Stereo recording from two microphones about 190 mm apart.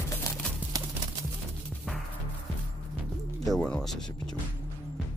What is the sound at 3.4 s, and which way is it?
Music, 5° left (ahead or behind).